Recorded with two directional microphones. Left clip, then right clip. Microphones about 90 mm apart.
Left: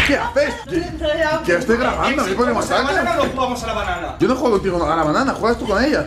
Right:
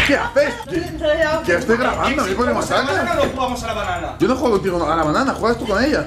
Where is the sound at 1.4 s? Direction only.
5° left (ahead or behind).